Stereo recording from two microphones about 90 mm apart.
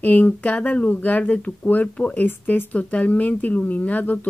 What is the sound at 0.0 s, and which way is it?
Speech, 20° left (ahead or behind).